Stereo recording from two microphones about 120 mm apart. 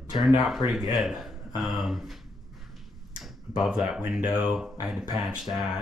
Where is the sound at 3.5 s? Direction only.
5° right (ahead or behind).